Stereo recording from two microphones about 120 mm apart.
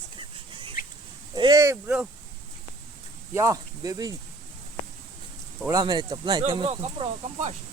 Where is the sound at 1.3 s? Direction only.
40° right (ahead or behind).